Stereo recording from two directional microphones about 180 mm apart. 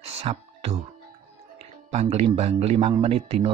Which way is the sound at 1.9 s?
40° right (ahead or behind).